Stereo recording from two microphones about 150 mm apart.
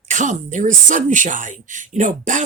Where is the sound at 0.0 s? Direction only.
55° right (ahead or behind).